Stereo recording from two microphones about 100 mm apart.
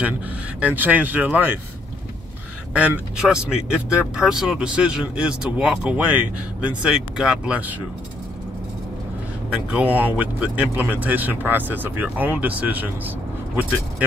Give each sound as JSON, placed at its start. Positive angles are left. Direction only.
{"t": 0.6, "sound": "speech", "side_deg": -15}
{"t": 3.2, "sound": "speech", "side_deg": -5}
{"t": 9.5, "sound": "speech", "side_deg": -15}